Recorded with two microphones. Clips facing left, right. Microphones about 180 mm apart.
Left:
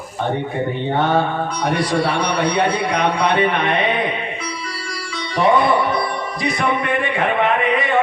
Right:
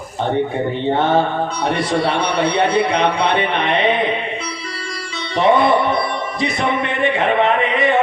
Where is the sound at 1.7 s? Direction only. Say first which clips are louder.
Even; 25° right (ahead or behind).